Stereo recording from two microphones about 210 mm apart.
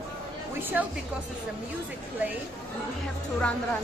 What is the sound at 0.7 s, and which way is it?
Speech, 10° right (ahead or behind).